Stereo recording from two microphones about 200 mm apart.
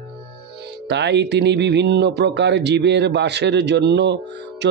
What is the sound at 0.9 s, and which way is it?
A man's voice, 60° right (ahead or behind).